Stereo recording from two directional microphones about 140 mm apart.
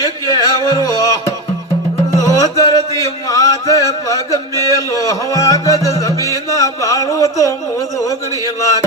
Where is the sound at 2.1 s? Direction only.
25° left (ahead or behind).